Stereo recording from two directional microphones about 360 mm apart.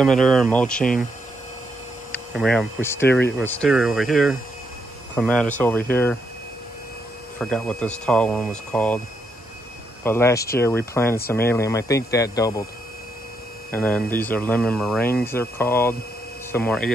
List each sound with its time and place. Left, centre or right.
0.0 s speech: centre
2.1 s speech: centre
3.1 s speech: left
3.3 s speech: centre
7.3 s speech: centre
10.0 s speech: centre
13.7 s speech: centre